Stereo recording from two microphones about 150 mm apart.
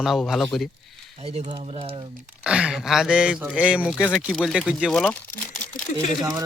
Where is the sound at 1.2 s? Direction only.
45° right (ahead or behind).